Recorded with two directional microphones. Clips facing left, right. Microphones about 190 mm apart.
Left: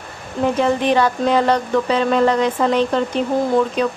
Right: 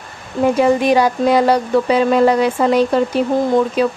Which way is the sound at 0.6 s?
10° right (ahead or behind).